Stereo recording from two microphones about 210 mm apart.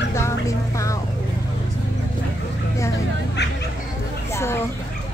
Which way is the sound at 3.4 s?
55° left (ahead or behind).